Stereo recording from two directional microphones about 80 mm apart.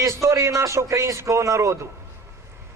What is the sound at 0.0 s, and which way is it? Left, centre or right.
A man's voice, right.